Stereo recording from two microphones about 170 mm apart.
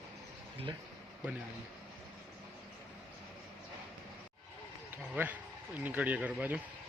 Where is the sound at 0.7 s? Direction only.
25° right (ahead or behind).